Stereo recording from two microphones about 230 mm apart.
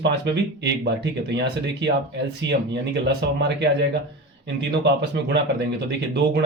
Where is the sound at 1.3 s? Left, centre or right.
Right.